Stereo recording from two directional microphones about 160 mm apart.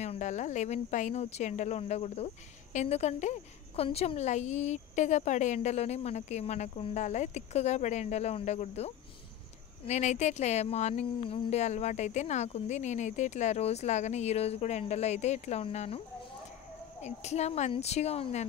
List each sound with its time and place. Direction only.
0.0 s speech: 45° left (ahead or behind)
17.0 s speech: 45° left (ahead or behind)